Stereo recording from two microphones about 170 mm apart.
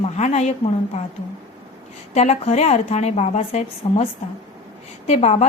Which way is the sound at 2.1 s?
40° left (ahead or behind).